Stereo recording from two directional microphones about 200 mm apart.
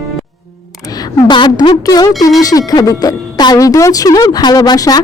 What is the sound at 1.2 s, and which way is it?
Speech, 20° left (ahead or behind).